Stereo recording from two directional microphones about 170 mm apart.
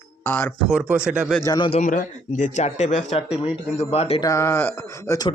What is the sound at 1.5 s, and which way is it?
Speech, 30° left (ahead or behind).